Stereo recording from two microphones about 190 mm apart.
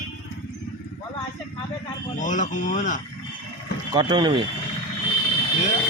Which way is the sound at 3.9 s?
25° right (ahead or behind).